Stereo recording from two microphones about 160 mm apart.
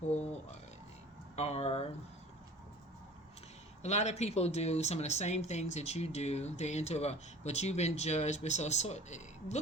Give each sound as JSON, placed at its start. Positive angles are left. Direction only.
{"t": 1.4, "sound": "speech", "side_deg": 40}
{"t": 3.8, "sound": "speech", "side_deg": 45}